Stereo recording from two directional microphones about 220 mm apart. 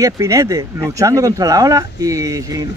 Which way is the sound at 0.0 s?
15° right (ahead or behind).